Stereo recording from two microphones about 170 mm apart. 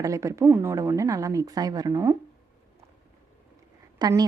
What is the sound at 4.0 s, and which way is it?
Speech, 20° right (ahead or behind).